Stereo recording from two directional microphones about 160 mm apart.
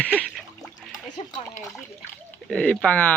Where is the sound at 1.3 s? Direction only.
20° left (ahead or behind).